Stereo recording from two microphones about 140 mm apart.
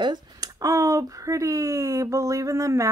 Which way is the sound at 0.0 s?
30° right (ahead or behind).